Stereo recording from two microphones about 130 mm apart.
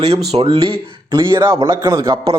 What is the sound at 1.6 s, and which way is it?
Speech, 25° right (ahead or behind).